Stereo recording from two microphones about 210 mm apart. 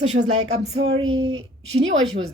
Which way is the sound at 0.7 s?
75° right (ahead or behind).